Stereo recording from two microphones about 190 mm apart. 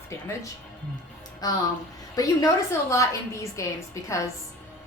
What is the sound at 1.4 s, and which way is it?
A woman's voice, 20° left (ahead or behind).